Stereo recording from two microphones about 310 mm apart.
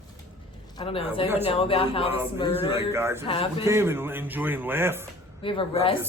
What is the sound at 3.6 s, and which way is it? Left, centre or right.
Speech, centre.